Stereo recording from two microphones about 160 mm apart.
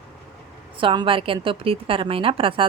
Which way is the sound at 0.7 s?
30° right (ahead or behind).